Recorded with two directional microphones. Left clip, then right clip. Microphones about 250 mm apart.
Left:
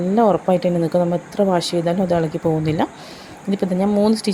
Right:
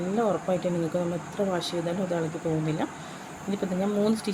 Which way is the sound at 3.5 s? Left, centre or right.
Left.